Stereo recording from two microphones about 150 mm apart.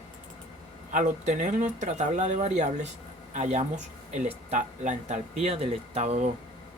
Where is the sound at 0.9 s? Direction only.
60° right (ahead or behind).